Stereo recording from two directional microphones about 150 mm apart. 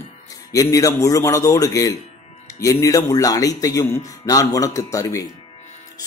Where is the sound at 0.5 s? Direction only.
20° left (ahead or behind).